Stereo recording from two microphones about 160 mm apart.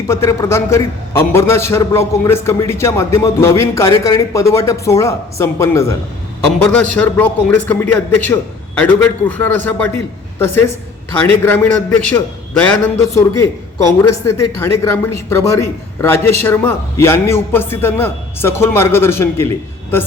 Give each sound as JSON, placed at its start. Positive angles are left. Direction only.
{"t": 0.1, "sound": "speech", "side_deg": 15}
{"t": 6.4, "sound": "speech", "side_deg": 5}